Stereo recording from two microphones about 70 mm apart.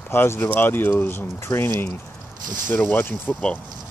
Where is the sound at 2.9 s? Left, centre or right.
Left.